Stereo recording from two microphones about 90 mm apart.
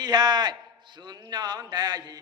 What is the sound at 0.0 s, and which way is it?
A man's voice, 50° right (ahead or behind).